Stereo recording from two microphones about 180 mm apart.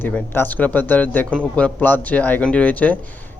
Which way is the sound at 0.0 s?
10° left (ahead or behind).